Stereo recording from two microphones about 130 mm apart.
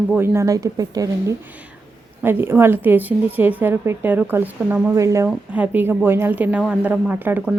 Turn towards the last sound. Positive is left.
turn(degrees=-15)  # may be behind; listen again after turning